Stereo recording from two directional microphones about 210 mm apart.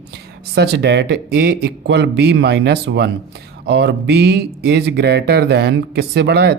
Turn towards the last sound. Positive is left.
turn(degrees=-50)  # may be behind; listen again after turning